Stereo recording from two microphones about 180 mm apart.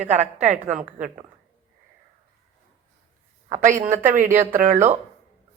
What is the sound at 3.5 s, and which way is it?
A woman's voice, 45° right (ahead or behind).